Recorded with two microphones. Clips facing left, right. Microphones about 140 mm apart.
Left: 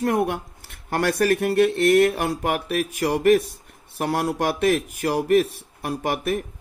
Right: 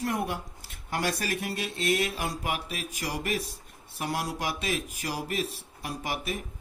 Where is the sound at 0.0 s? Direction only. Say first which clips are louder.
Left 8 dB; 60° left (ahead or behind).